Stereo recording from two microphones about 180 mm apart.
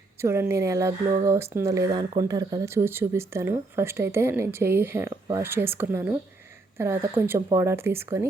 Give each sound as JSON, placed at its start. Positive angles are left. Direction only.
{"t": 0.2, "sound": "speech", "side_deg": -15}